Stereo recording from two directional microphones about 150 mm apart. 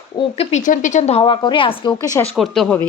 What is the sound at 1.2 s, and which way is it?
Speech, 35° left (ahead or behind).